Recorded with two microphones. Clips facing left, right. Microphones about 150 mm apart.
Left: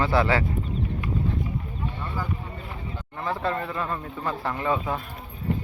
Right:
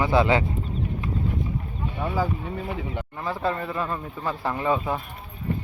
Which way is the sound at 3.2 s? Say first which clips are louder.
Even; 10° right (ahead or behind).